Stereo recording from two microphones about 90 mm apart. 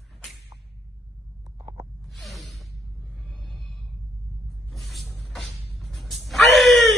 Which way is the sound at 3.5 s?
Centre (ahead or behind).